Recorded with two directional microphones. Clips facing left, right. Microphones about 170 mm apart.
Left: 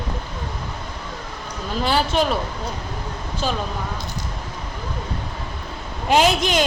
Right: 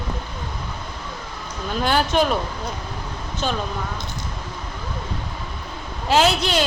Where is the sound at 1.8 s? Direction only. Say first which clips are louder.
Right 1 dB; centre (ahead or behind).